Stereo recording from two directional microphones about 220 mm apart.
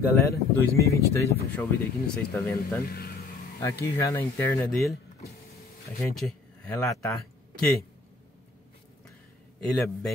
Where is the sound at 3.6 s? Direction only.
10° left (ahead or behind).